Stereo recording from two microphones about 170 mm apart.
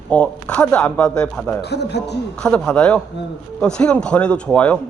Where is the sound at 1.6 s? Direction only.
80° left.